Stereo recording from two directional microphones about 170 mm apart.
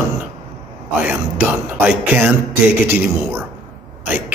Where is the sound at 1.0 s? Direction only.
10° right (ahead or behind).